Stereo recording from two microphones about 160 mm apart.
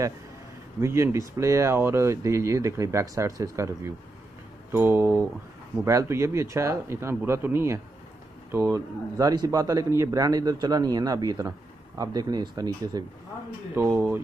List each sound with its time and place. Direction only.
0.7 s a man's voice: 15° right (ahead or behind)